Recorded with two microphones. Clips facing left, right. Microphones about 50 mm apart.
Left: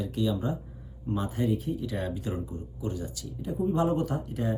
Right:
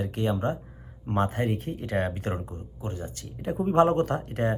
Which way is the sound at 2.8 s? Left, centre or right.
Right.